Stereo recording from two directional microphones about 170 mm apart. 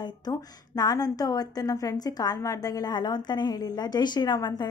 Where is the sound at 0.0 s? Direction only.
25° left (ahead or behind).